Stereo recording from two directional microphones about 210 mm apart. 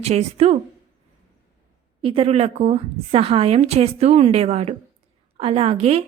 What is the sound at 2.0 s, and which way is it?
A woman's voice, 25° right (ahead or behind).